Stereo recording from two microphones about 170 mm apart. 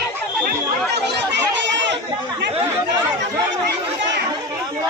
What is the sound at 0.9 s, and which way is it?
Chatter, 90° right.